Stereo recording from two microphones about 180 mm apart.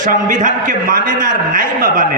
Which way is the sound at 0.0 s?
45° right (ahead or behind).